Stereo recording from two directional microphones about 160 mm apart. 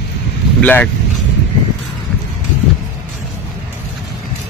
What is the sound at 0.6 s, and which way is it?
Speech, 10° left (ahead or behind).